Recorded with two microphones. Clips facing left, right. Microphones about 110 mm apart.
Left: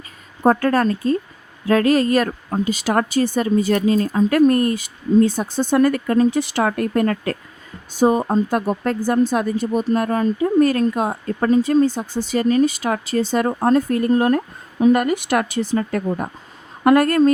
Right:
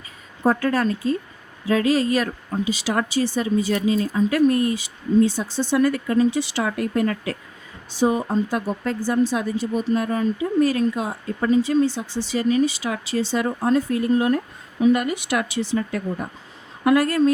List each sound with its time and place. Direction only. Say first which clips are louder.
0.4 s speech: left 4 dB; 50° left (ahead or behind)